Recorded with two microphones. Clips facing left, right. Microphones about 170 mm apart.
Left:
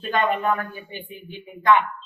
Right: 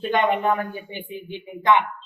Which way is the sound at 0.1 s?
20° right (ahead or behind).